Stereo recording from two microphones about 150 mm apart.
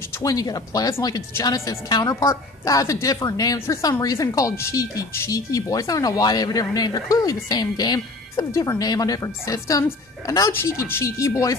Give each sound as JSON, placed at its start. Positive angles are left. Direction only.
{"t": 0.2, "sound": "a woman's voice", "side_deg": 25}